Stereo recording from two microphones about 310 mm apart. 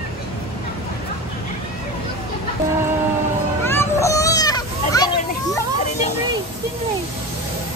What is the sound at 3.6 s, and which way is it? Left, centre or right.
Children playing, centre.